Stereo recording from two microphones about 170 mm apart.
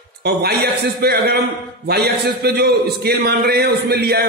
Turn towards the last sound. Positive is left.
turn(degrees=-70)  # may be behind; listen again after turning